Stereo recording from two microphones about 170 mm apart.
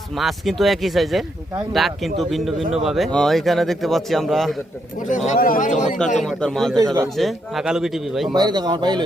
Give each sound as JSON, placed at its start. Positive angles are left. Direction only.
{"t": 0.2, "sound": "speech", "side_deg": 0}
{"t": 4.9, "sound": "speech", "side_deg": 45}
{"t": 6.2, "sound": "speech", "side_deg": 5}
{"t": 6.7, "sound": "speech", "side_deg": -20}
{"t": 7.2, "sound": "speech", "side_deg": 0}
{"t": 8.3, "sound": "speech", "side_deg": -25}